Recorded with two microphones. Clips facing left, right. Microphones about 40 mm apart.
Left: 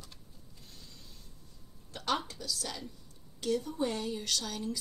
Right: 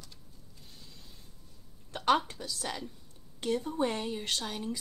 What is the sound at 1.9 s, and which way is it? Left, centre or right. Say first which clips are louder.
A woman's voice: right 6 dB; right.